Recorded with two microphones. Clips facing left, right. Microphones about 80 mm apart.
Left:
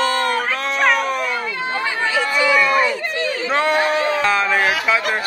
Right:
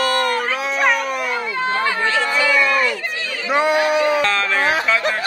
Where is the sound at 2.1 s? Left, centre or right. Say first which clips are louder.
Left 4 dB; centre.